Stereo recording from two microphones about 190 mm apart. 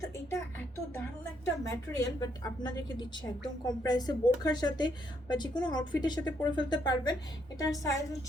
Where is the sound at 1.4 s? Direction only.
20° left (ahead or behind).